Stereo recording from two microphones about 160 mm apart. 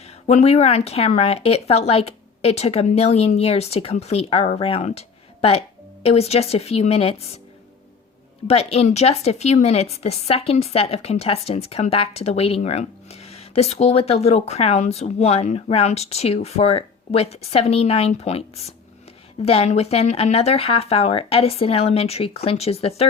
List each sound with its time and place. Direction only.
0.0 s speech: 40° left (ahead or behind)
8.4 s speech: 40° left (ahead or behind)